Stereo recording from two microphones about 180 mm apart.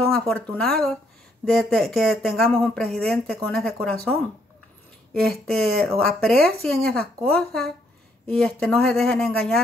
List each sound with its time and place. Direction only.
0.3 s speech: 5° left (ahead or behind)
5.3 s speech: centre (ahead or behind)